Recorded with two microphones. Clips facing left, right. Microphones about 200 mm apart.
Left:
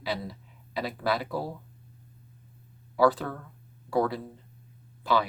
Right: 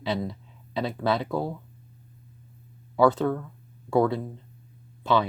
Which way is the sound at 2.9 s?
25° right (ahead or behind).